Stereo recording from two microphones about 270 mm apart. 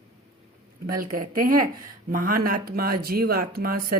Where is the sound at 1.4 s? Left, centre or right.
Right.